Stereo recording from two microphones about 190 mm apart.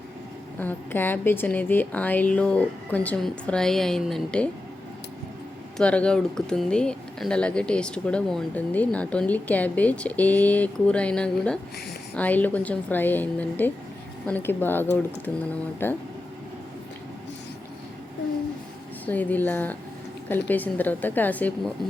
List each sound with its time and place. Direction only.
0.6 s a woman's voice: 10° left (ahead or behind)
5.7 s a woman's voice: 5° left (ahead or behind)
19.0 s a woman's voice: 10° left (ahead or behind)